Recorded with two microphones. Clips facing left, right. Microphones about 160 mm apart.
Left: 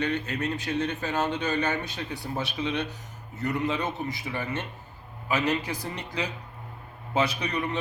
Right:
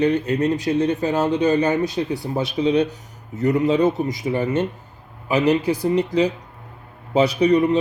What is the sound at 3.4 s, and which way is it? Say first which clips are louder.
Speech: right 11 dB; 35° right (ahead or behind).